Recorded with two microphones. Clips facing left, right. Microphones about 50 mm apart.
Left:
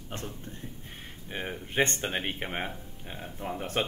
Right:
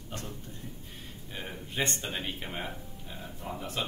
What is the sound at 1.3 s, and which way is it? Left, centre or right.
Speech, left.